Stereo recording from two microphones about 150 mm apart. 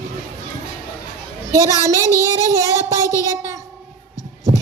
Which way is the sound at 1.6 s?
20° right (ahead or behind).